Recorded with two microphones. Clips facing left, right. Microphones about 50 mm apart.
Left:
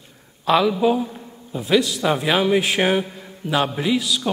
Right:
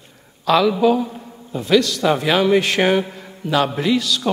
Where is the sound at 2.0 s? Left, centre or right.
Centre.